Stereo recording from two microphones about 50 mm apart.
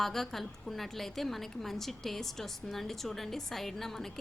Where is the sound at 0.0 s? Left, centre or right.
Centre.